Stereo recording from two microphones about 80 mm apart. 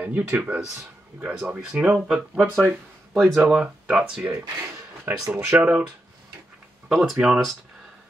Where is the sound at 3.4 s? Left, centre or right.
Centre.